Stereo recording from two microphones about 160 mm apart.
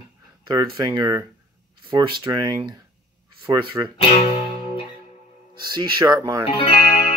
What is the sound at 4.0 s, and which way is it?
Speech, 40° left (ahead or behind).